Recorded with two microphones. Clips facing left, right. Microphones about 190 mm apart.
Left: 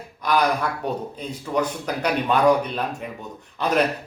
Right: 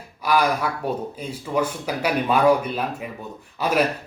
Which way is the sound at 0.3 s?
10° right (ahead or behind).